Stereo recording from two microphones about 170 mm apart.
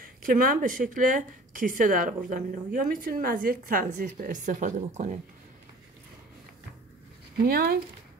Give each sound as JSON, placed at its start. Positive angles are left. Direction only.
{"t": 0.0, "sound": "speech", "side_deg": -55}
{"t": 7.4, "sound": "speech", "side_deg": -60}